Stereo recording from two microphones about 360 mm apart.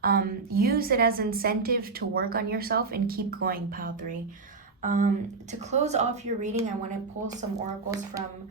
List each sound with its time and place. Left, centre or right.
0.0 s a woman's voice: right
7.5 s speech: centre